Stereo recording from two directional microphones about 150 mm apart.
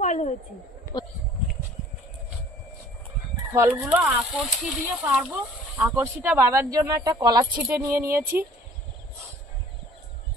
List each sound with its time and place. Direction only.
0.0 s a sound: 50° left (ahead or behind)
3.5 s speech: 15° right (ahead or behind)
4.4 s speech: 5° right (ahead or behind)